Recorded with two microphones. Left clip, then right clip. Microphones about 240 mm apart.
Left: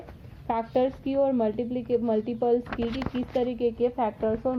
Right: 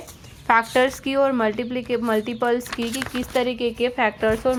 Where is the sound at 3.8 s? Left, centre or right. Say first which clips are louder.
Right 6 dB; right.